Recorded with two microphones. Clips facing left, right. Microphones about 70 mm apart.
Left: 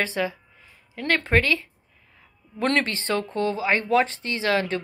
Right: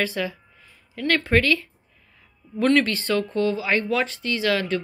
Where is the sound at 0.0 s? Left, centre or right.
Left.